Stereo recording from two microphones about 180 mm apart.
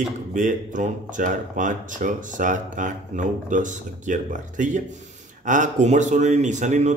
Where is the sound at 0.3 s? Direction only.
45° right (ahead or behind).